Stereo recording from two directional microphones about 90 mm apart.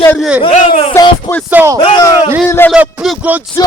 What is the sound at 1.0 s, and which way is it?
Music, 30° left (ahead or behind).